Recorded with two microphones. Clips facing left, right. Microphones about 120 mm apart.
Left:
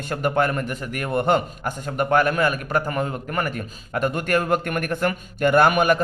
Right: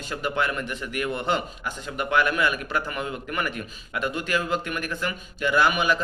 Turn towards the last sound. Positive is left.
turn(degrees=50)  # may be behind; listen again after turning